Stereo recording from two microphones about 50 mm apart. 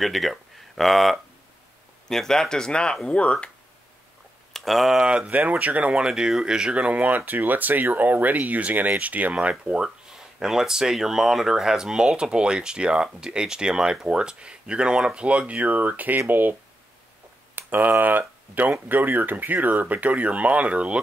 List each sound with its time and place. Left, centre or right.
0.0 s speech: centre; by 3.4 s left
4.6 s speech: centre
5.0 s speech: right
6.0 s speech: centre
9.8 s speech: centre; by 16.5 s right
17.6 s a sound: right
18.0 s speech: right